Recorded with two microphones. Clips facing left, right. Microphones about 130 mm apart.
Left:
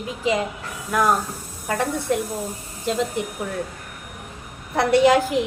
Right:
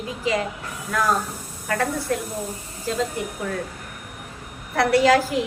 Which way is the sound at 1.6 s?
20° left (ahead or behind).